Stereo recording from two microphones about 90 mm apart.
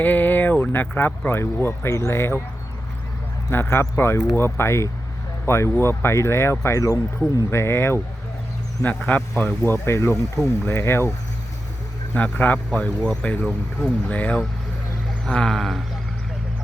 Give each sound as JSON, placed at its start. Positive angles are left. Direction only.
{"t": 0.0, "sound": "speech", "side_deg": 20}
{"t": 3.5, "sound": "speech", "side_deg": 25}
{"t": 8.8, "sound": "a man's voice", "side_deg": 15}
{"t": 12.1, "sound": "a man's voice", "side_deg": 20}
{"t": 15.2, "sound": "a sound", "side_deg": 10}